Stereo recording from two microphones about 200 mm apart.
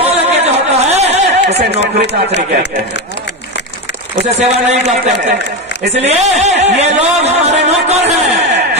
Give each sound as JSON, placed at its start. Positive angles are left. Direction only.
{"t": 0.0, "sound": "a sound", "side_deg": -30}
{"t": 1.6, "sound": "speech", "side_deg": -55}
{"t": 4.3, "sound": "a man's voice", "side_deg": -35}
{"t": 5.9, "sound": "a man's voice", "side_deg": -35}